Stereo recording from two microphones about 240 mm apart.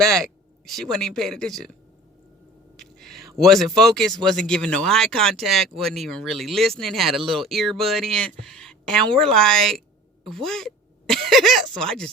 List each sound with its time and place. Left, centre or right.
0.2 s speech: centre
2.7 s speech: centre